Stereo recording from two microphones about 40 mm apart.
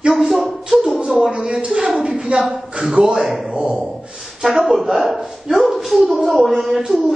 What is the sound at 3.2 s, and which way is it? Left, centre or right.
Speech, centre.